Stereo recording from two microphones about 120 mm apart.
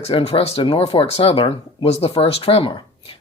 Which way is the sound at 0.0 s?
55° left (ahead or behind).